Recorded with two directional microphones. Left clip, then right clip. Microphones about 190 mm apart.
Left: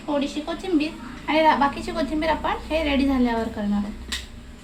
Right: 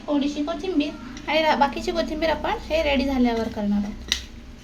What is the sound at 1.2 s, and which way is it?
A woman's voice, 40° right (ahead or behind).